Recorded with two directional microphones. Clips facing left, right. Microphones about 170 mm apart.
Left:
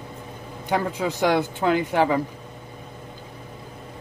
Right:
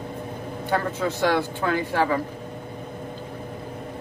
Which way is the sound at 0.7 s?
15° left (ahead or behind).